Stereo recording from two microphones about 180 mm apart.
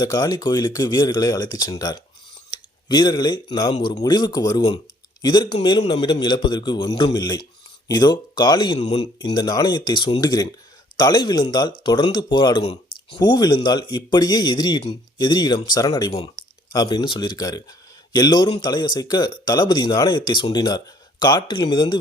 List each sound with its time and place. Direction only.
0.0 s speech: 20° left (ahead or behind)
9.2 s speech: 20° left (ahead or behind)
12.6 s a sound: 35° left (ahead or behind)
13.1 s speech: 25° left (ahead or behind)